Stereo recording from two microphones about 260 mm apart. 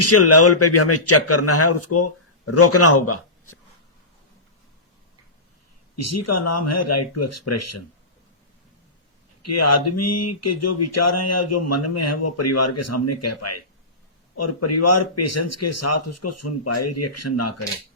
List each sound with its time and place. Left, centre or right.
0.0 s a man's voice: left
6.0 s speech: left
9.4 s speech: left